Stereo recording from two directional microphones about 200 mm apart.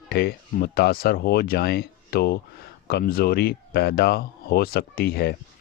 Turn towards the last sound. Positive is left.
turn(degrees=50)  # may be behind; listen again after turning